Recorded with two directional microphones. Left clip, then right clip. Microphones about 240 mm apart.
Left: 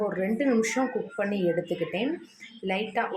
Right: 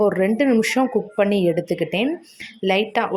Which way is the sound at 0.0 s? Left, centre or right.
Right.